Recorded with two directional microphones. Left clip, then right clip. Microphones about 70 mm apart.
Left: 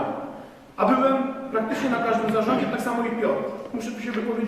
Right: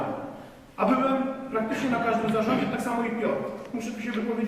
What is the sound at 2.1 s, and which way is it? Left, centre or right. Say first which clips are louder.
Speech: left 3 dB; centre.